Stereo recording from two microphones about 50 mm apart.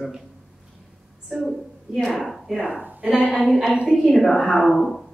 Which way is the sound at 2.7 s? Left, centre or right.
Right.